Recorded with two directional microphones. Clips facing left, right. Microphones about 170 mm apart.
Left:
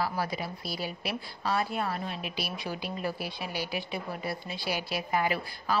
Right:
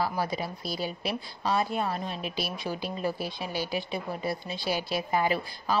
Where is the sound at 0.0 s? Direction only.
25° right (ahead or behind).